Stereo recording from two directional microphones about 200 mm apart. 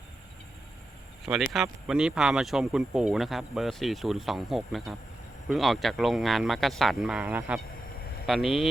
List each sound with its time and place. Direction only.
1.2 s speech: centre (ahead or behind)